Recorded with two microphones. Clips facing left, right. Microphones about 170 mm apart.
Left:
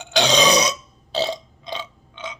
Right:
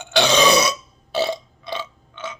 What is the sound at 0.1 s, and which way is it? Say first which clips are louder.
Burping: right 1 dB; 15° left (ahead or behind).